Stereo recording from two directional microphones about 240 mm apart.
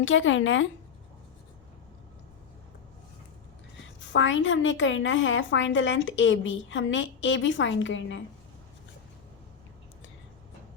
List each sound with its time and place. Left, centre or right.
0.0 s a woman's voice: left
4.1 s a woman's voice: left